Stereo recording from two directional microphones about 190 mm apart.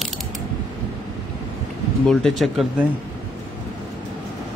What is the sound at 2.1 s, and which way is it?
Speech, centre (ahead or behind).